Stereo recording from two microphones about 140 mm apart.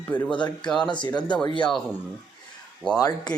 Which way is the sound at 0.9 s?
35° left (ahead or behind).